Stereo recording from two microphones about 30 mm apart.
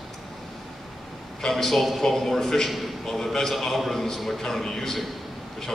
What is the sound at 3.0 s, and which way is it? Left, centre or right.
Speech, centre.